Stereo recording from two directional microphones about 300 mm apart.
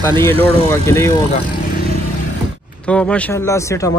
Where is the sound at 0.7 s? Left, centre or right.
Centre.